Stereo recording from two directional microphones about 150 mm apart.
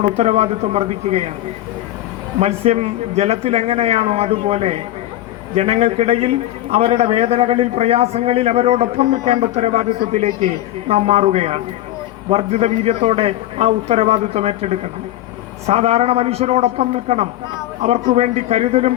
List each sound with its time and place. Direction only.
0.0 s a man's voice: 45° right (ahead or behind)
2.4 s a man's voice: 45° right (ahead or behind)